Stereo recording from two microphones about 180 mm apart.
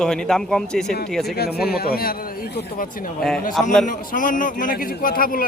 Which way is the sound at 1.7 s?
55° left (ahead or behind).